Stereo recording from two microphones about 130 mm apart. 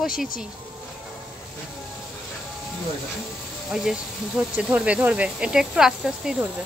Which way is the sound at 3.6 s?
5° right (ahead or behind).